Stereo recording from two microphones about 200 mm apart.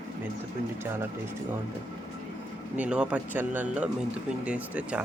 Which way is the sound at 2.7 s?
5° right (ahead or behind).